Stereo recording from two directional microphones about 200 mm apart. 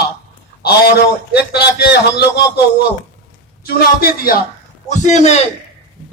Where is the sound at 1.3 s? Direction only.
55° left (ahead or behind).